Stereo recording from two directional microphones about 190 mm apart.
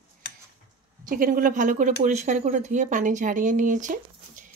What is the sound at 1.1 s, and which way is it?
Speech, 45° right (ahead or behind).